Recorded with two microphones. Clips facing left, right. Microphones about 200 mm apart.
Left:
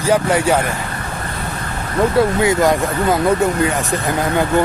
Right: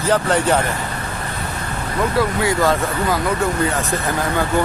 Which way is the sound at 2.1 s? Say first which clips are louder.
Left 4 dB; 20° left (ahead or behind).